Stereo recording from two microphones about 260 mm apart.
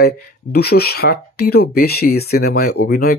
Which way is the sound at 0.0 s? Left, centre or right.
Left.